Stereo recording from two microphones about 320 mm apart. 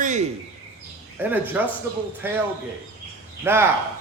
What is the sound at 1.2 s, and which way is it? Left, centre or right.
A man's voice, centre.